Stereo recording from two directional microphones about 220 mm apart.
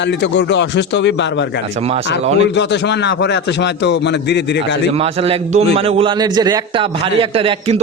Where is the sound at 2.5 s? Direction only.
50° left (ahead or behind).